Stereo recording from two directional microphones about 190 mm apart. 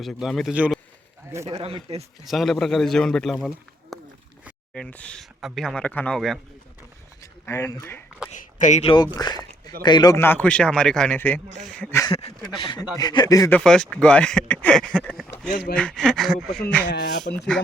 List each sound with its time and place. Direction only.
0.0 s speech: centre (ahead or behind)
1.3 s speech: 15° right (ahead or behind)
1.5 s speech: 30° right (ahead or behind)
2.2 s speech: centre (ahead or behind)
7.2 s speech: 15° left (ahead or behind)
8.3 s speech: 40° left (ahead or behind); by 12.1 s 15° left (ahead or behind)
12.1 s speech: 25° left (ahead or behind)
13.6 s speech: 5° left (ahead or behind)
16.9 s speech: 60° left (ahead or behind)
17.3 s speech: 5° left (ahead or behind)